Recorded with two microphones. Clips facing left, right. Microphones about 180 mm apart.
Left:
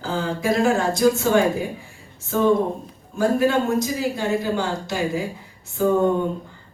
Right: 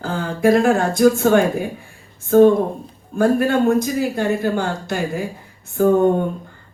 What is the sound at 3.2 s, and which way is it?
Speech, 55° right (ahead or behind).